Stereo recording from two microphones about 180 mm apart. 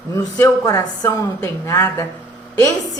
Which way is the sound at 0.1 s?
15° left (ahead or behind).